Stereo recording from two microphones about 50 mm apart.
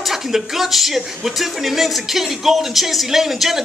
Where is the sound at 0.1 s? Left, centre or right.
Centre.